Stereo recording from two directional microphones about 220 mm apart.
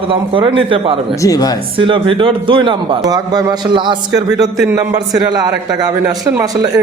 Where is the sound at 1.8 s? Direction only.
25° right (ahead or behind).